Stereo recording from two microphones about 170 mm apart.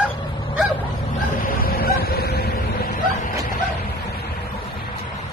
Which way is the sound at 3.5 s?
70° left (ahead or behind).